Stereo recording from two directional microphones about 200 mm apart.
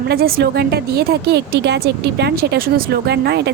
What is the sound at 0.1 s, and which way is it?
A woman's voice, 50° right (ahead or behind).